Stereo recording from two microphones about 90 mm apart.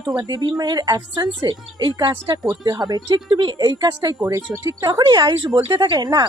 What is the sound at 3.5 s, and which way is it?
A woman's voice, 50° right (ahead or behind).